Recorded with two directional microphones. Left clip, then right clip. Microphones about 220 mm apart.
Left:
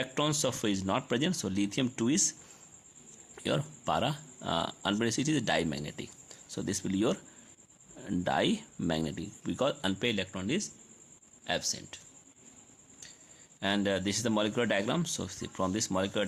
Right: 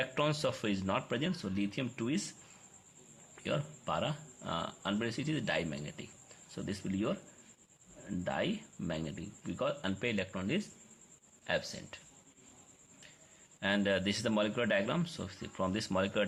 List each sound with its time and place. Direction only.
0.0 s speech: 35° left (ahead or behind)
3.3 s a man's voice: 45° left (ahead or behind)
13.6 s a man's voice: 40° left (ahead or behind)